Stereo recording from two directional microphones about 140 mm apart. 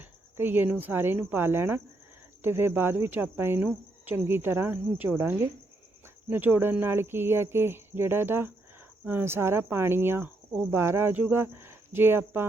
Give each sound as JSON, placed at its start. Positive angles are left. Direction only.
{"t": 0.3, "sound": "speech", "side_deg": -15}